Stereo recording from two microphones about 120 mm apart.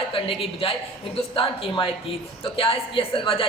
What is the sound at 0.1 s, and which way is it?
A woman's voice, 50° left (ahead or behind).